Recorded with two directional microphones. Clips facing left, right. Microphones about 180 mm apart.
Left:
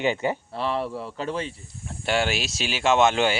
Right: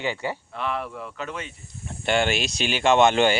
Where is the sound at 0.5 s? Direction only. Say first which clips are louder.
Left 3 dB; 30° left (ahead or behind).